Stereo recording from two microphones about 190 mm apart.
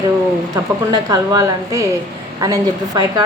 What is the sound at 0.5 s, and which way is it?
A woman's voice, 15° right (ahead or behind).